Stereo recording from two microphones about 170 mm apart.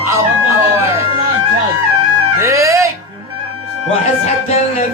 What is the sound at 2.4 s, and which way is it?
Music, 15° right (ahead or behind).